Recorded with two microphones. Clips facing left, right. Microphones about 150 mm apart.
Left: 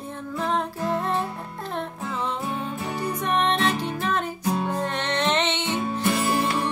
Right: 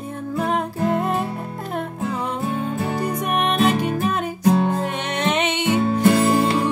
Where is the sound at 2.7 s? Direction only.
40° right (ahead or behind).